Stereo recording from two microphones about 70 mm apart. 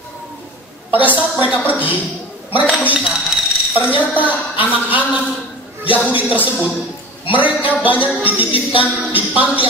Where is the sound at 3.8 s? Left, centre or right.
Right.